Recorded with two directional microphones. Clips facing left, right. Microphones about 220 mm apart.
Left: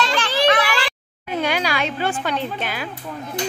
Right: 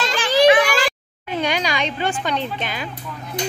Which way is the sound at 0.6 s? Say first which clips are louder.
Right 4 dB; 45° right (ahead or behind).